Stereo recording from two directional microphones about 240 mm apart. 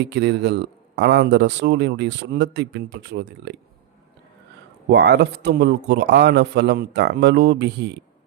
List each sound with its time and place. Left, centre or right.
0.0 s speech: right
4.9 s speech: right